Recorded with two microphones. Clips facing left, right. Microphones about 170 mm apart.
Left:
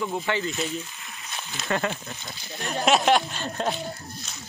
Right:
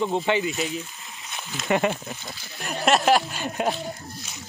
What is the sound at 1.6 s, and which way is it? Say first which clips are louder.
Speech: right 5 dB; 20° right (ahead or behind).